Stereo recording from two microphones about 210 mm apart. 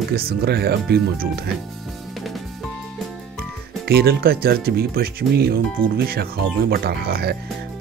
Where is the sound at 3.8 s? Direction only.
50° right (ahead or behind).